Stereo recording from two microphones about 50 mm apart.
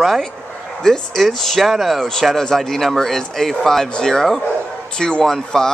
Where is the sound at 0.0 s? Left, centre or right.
Centre.